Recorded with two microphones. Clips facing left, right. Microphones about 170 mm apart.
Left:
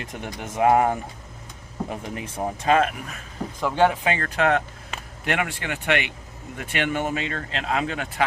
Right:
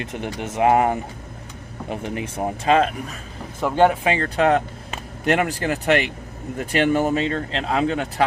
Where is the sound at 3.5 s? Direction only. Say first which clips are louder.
Right 3 dB; 10° right (ahead or behind).